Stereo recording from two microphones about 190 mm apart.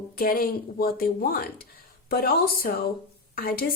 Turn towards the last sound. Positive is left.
turn(degrees=50)  # may be behind; listen again after turning